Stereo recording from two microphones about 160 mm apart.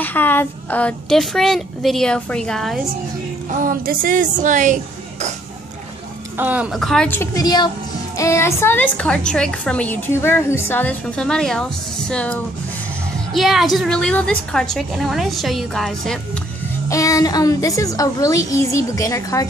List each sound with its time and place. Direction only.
0.0 s a woman's voice: 10° left (ahead or behind)
3.4 s a woman's voice: 60° right (ahead or behind)
6.3 s a woman's voice: 10° right (ahead or behind)
7.1 s a woman's voice: 15° left (ahead or behind)
7.4 s a woman's voice: 25° left (ahead or behind); by 16.2 s centre (ahead or behind)
16.9 s a woman's voice: 20° left (ahead or behind)